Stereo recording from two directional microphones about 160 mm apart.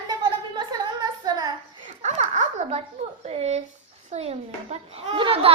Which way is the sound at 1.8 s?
40° right (ahead or behind).